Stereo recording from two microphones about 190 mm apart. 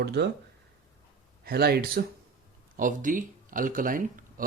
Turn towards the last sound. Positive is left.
turn(degrees=-45)  # may be behind; listen again after turning